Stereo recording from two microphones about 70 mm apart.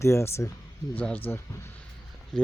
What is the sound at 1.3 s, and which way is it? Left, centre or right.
Speech, left.